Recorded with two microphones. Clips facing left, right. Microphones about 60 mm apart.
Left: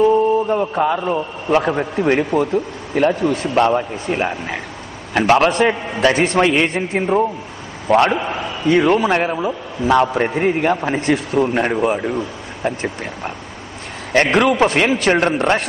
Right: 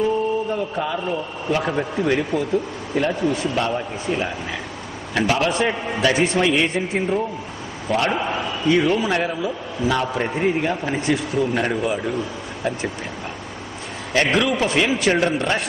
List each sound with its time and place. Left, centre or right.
0.5 s a man's voice: left
9.0 s a man's voice: left
11.5 s a man's voice: left
14.1 s a man's voice: left